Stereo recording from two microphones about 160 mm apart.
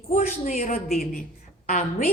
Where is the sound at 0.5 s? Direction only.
65° left (ahead or behind).